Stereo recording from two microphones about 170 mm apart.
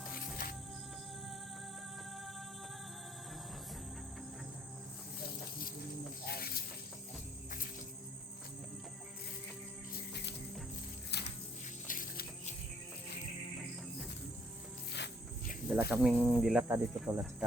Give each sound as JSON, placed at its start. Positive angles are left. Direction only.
{"t": 0.1, "sound": "music", "side_deg": 55}
{"t": 6.2, "sound": "snake", "side_deg": 65}
{"t": 10.1, "sound": "music", "side_deg": 75}
{"t": 11.1, "sound": "a sound", "side_deg": 80}
{"t": 11.9, "sound": "a sound", "side_deg": 50}
{"t": 15.7, "sound": "speech", "side_deg": -5}
{"t": 16.6, "sound": "speech", "side_deg": -15}